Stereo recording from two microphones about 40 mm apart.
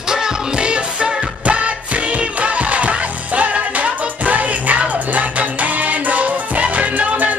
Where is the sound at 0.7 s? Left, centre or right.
Right.